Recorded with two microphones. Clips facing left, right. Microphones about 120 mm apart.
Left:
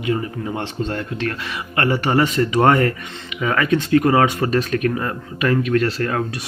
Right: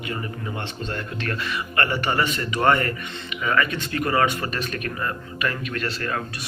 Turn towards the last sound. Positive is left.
turn(degrees=65)  # may be behind; listen again after turning